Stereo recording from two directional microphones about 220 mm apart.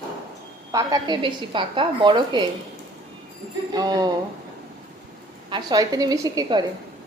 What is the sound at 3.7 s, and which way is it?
Speech, 15° right (ahead or behind).